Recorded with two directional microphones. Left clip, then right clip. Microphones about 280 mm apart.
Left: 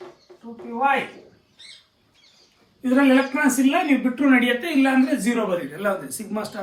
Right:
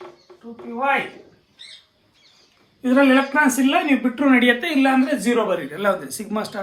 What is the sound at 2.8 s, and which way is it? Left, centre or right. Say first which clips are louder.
A man's voice: right 2 dB; centre.